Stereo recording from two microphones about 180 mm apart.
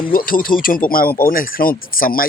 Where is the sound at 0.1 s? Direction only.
50° left (ahead or behind).